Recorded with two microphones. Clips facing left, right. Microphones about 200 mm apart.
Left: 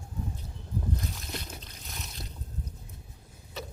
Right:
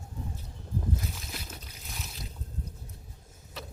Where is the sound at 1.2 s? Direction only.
5° right (ahead or behind).